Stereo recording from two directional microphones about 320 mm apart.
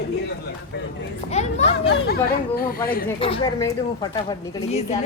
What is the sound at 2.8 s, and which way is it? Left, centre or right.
A child's voice, left.